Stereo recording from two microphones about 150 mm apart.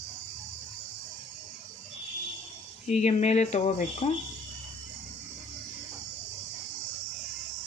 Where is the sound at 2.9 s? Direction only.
50° left (ahead or behind).